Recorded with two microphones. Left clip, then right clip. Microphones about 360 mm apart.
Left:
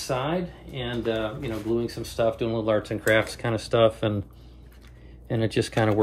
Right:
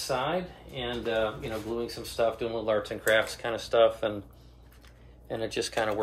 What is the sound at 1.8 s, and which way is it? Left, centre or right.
Speech, centre.